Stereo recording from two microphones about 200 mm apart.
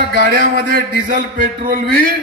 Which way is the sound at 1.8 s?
45° right (ahead or behind).